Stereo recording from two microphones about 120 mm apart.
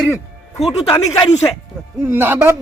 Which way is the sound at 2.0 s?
20° right (ahead or behind).